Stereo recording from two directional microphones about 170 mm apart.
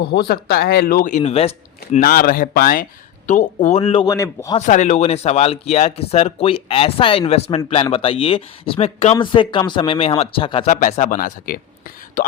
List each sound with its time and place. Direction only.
0.0 s speech: 70° left (ahead or behind); by 1.2 s 55° left (ahead or behind)
1.2 s speech: 35° left (ahead or behind)
2.0 s speech: 60° left (ahead or behind)
3.2 s speech: 45° left (ahead or behind)
4.1 s speech: 20° left (ahead or behind)
4.5 s speech: 45° left (ahead or behind)
10.7 s speech: 50° left (ahead or behind)